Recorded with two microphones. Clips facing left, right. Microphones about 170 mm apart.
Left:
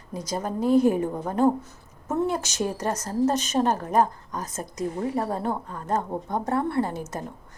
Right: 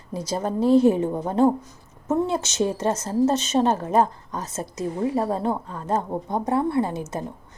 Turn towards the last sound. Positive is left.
turn(degrees=-20)  # may be behind; listen again after turning